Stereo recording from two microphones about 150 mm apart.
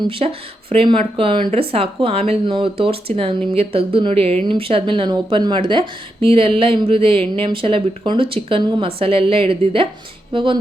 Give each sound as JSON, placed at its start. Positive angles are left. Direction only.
{"t": 0.0, "sound": "speech", "side_deg": -40}